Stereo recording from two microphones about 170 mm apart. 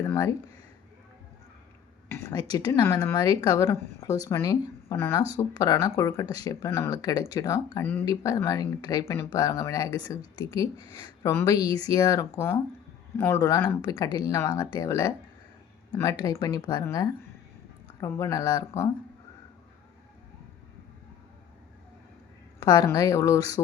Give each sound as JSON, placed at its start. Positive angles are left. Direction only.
{"t": 0.0, "sound": "speech", "side_deg": 20}
{"t": 2.0, "sound": "speech", "side_deg": 20}
{"t": 22.6, "sound": "speech", "side_deg": 20}